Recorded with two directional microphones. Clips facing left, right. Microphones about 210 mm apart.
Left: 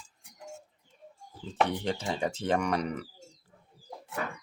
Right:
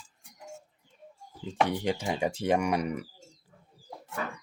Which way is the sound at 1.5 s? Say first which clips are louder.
Right 1 dB; 10° right (ahead or behind).